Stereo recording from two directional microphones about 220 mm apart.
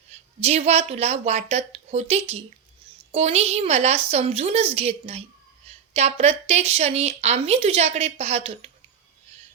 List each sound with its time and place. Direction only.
0.3 s a woman's voice: 30° right (ahead or behind)